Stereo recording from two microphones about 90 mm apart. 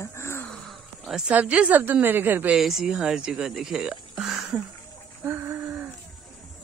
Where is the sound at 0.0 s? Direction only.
30° left (ahead or behind).